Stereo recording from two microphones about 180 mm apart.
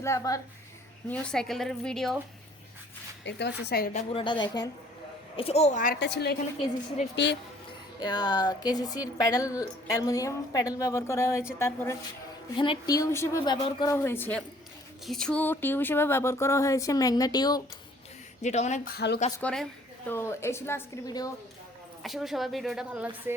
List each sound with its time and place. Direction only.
0.0 s speech: 15° left (ahead or behind)
1.0 s speech: 5° left (ahead or behind)
3.2 s a woman's voice: 70° left (ahead or behind)
3.6 s a woman's voice: 60° left (ahead or behind)
4.1 s speech: 25° left (ahead or behind)
5.4 s a woman's voice: 35° left (ahead or behind)
6.0 s a woman's voice: 70° left (ahead or behind)
7.9 s speech: 20° left (ahead or behind)
12.5 s speech: 25° left (ahead or behind)
13.9 s speech: 15° left (ahead or behind)
18.4 s a woman's voice: 40° left (ahead or behind)
18.9 s a woman's voice: 65° left (ahead or behind)
19.4 s speech: 5° left (ahead or behind)
22.0 s speech: centre (ahead or behind)